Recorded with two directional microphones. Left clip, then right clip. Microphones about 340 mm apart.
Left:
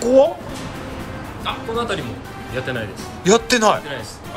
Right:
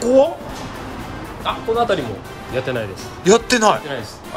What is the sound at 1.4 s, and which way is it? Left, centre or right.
Speech, right.